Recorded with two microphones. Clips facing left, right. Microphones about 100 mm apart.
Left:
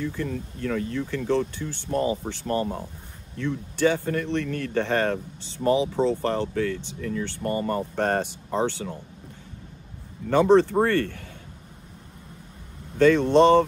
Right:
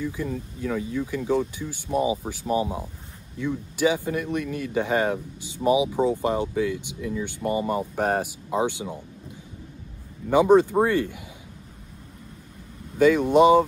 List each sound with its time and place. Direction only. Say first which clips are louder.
0.0 s speech: even; 10° right (ahead or behind)
10.3 s speech: right 1 dB; 10° right (ahead or behind)
12.9 s speech: even; 10° right (ahead or behind)